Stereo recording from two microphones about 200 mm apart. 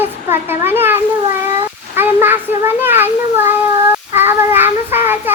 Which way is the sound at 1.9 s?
10° right (ahead or behind).